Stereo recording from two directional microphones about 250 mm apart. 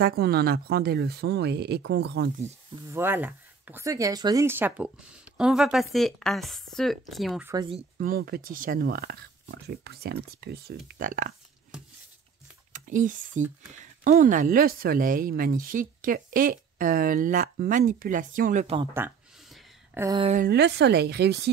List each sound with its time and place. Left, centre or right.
0.0 s speech: right
2.9 s speech: centre
7.5 s speech: centre
8.0 s speech: right
12.7 s speech: right
18.8 s a sound: centre
20.2 s speech: right